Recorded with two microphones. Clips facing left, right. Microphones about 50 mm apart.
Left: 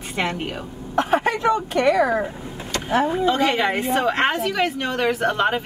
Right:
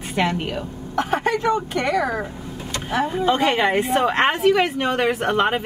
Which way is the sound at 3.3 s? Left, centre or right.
Centre.